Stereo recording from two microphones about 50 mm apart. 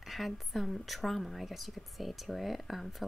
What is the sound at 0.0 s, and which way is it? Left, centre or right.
A woman's voice, centre.